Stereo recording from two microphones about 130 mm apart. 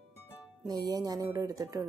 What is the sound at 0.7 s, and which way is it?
Speech, 30° right (ahead or behind).